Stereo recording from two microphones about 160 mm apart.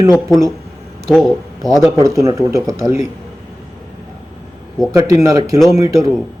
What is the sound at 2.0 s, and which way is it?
Speech, 20° right (ahead or behind).